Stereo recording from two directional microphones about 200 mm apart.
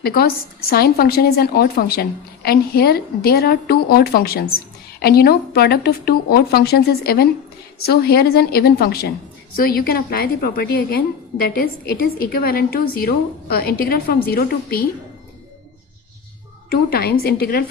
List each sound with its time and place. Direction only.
0.0 s speech: 50° left (ahead or behind)
16.6 s speech: 50° left (ahead or behind)